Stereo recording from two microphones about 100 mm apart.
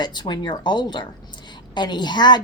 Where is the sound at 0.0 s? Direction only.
45° left (ahead or behind).